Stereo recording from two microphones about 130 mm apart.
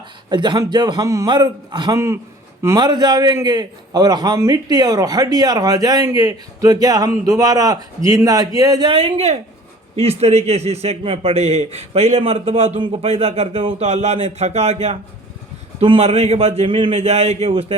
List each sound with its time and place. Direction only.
0.3 s a man's voice: 35° right (ahead or behind)
8.9 s a man's voice: 45° right (ahead or behind)